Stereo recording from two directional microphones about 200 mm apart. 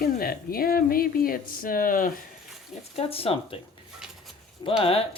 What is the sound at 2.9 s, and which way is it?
Speech, 30° left (ahead or behind).